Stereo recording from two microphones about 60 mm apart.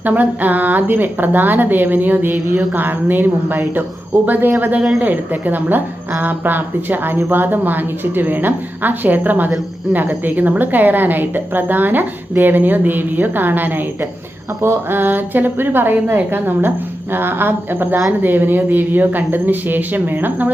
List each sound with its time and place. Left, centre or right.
0.0 s a woman's voice: right